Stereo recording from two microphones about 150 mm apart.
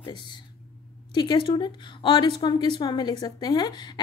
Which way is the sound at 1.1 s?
30° left (ahead or behind).